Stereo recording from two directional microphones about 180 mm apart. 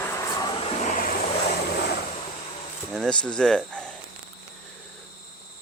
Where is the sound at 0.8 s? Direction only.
50° left (ahead or behind).